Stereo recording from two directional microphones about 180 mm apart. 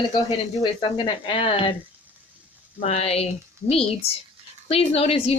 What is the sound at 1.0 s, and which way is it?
Speech, 30° left (ahead or behind).